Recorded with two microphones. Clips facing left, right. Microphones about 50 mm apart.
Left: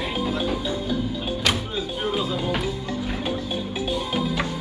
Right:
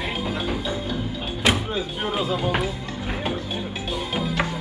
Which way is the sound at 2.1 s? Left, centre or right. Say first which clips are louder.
Right 3 dB; right.